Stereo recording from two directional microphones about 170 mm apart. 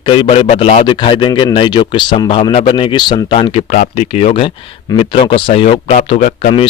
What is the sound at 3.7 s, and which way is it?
Speech, 45° left (ahead or behind).